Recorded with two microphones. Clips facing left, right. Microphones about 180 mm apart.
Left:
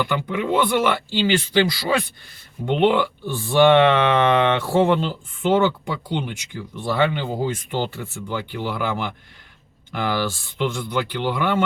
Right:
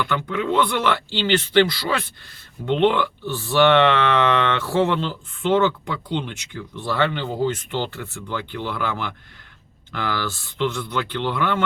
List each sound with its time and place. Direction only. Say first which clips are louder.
0.1 s speech: left 1 dB; 10° left (ahead or behind)